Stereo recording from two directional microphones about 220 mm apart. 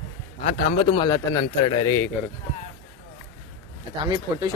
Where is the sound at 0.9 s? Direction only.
20° left (ahead or behind).